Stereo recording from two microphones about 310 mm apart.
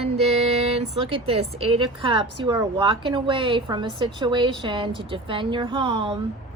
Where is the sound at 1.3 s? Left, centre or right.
Centre.